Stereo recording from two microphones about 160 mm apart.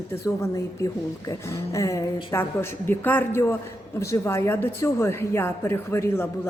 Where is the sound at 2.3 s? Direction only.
15° left (ahead or behind).